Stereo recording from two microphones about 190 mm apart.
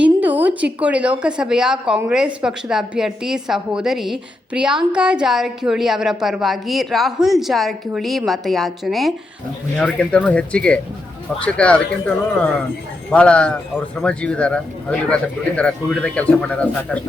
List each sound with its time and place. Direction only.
0.0 s a sound: 10° right (ahead or behind)
1.2 s a woman's voice: 5° right (ahead or behind)
13.1 s a woman's voice: 5° left (ahead or behind)